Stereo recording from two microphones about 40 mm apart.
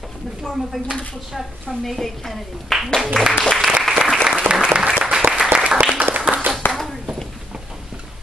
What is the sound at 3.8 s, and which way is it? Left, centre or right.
Applause, centre.